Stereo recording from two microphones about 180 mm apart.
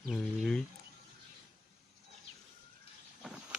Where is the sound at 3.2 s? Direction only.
5° right (ahead or behind).